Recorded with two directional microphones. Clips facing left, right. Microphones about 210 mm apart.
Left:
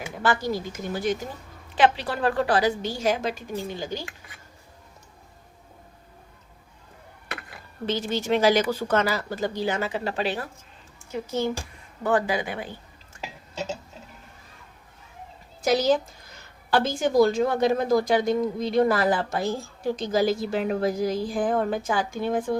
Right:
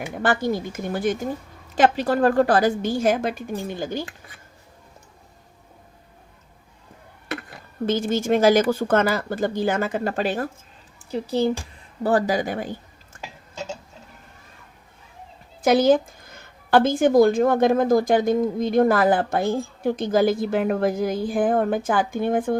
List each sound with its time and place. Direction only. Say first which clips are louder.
0.0 s a woman's voice: right 3 dB; 55° right (ahead or behind)
7.9 s a woman's voice: right 4 dB; 50° right (ahead or behind)
11.1 s speech: right 5 dB; 35° right (ahead or behind)
15.6 s a woman's voice: right 5 dB; 55° right (ahead or behind)